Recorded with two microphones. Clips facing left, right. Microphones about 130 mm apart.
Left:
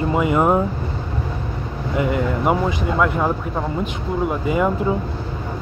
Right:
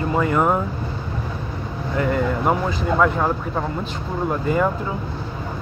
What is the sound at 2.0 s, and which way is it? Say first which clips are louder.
Speech: even; 10° left (ahead or behind).